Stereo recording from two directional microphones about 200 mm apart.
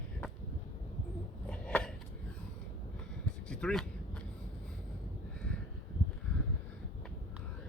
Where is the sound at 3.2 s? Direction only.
5° left (ahead or behind).